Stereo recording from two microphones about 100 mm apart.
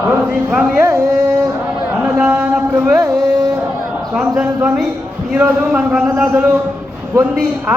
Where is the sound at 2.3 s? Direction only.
20° right (ahead or behind).